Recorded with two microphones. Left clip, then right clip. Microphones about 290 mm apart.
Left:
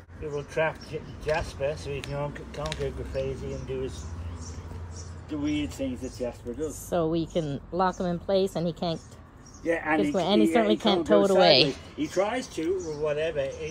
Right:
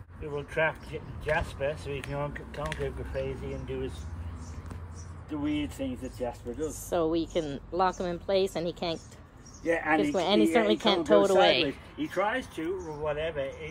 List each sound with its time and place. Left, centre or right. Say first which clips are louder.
0.2 s speech: left 1 dB; centre
5.3 s speech: left 2 dB; centre
11.4 s speech: left 4 dB; centre